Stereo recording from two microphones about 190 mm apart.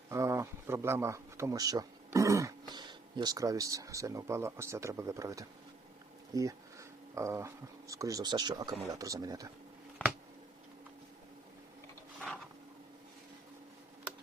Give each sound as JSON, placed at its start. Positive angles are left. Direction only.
{"t": 0.1, "sound": "speech", "side_deg": -15}